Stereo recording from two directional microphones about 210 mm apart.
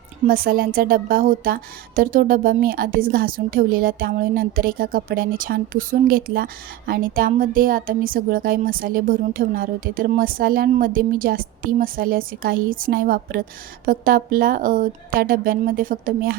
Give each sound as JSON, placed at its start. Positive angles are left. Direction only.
{"t": 0.3, "sound": "a woman's voice", "side_deg": -45}